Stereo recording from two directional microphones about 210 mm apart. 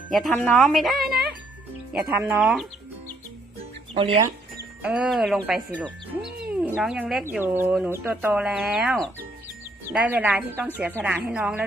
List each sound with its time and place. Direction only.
0.1 s speech: centre (ahead or behind)
3.9 s speech: 25° right (ahead or behind)
4.8 s speech: 5° right (ahead or behind)